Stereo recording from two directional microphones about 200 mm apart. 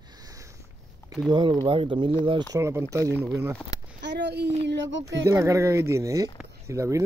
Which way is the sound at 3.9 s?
60° right (ahead or behind).